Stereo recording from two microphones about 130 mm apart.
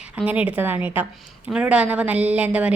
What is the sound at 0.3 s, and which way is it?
A woman's voice, 10° right (ahead or behind).